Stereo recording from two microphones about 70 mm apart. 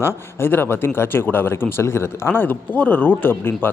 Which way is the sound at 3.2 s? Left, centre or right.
Left.